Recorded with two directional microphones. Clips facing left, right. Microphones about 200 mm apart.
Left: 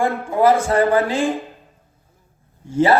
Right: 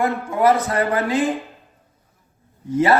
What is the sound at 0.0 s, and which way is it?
A man's voice, 30° left (ahead or behind).